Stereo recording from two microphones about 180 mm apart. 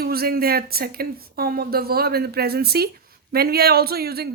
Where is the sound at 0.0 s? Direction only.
60° right (ahead or behind).